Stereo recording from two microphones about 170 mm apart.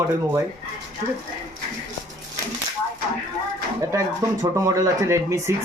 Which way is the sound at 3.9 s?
20° right (ahead or behind).